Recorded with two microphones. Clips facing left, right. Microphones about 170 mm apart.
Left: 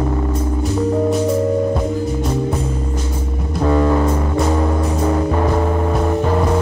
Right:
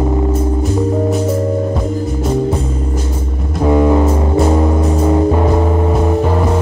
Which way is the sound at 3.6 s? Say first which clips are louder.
Right 4 dB; 15° right (ahead or behind).